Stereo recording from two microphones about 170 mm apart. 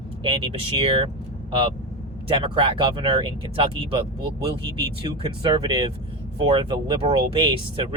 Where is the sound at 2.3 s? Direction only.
30° right (ahead or behind).